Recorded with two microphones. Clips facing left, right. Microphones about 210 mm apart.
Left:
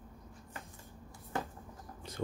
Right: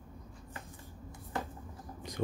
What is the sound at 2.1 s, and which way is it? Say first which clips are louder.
Whispering: right 3 dB; 15° right (ahead or behind).